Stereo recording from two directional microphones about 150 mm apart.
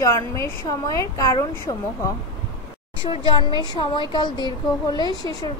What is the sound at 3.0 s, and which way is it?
Speech, 35° left (ahead or behind).